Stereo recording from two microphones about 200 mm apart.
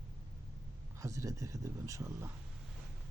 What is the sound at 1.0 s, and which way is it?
A man's voice, 15° right (ahead or behind).